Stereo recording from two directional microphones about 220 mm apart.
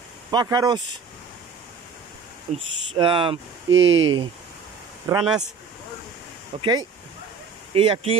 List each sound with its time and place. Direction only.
0.3 s speech: 20° right (ahead or behind)
2.5 s speech: 25° right (ahead or behind)
3.8 s speech: 60° right (ahead or behind)
5.1 s speech: 15° right (ahead or behind)
6.6 s speech: 20° right (ahead or behind)